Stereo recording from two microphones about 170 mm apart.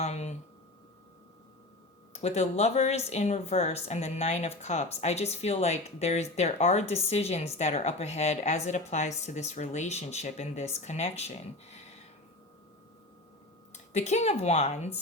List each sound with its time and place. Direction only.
0.0 s speech: 40° left (ahead or behind)
2.1 s speech: 40° left (ahead or behind)
13.7 s speech: 40° left (ahead or behind)